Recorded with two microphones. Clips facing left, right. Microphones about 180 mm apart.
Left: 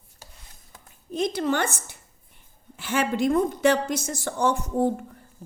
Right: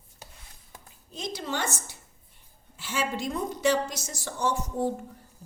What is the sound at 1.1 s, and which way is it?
A woman's voice, 55° left (ahead or behind).